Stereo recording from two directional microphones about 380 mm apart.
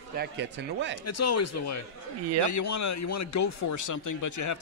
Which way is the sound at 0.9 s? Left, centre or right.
Left.